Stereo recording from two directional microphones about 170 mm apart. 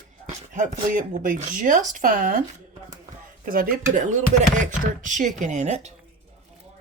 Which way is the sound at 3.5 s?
50° right (ahead or behind).